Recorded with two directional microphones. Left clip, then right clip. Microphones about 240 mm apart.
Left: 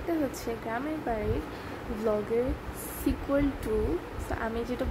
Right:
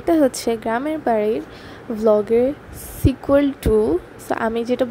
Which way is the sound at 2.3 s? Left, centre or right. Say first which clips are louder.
Right 12 dB; right.